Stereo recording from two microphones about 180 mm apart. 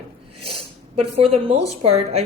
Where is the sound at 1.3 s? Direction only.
35° right (ahead or behind).